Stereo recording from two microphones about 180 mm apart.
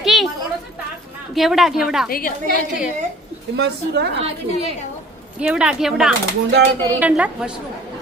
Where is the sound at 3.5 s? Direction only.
65° right (ahead or behind).